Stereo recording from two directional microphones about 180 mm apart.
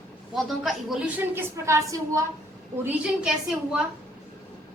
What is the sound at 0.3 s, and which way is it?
A woman's voice, centre (ahead or behind).